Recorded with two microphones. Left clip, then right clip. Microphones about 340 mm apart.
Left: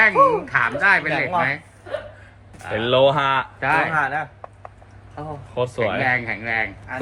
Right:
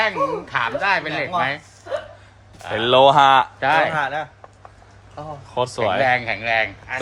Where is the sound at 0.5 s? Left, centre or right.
Centre.